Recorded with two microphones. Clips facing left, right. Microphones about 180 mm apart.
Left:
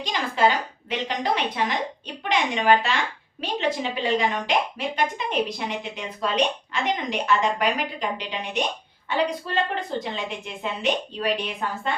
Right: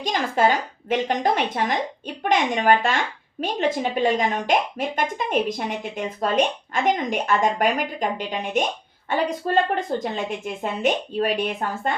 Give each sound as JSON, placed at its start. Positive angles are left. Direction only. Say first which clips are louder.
{"t": 0.0, "sound": "speech", "louder": "right 2 dB", "side_deg": -50}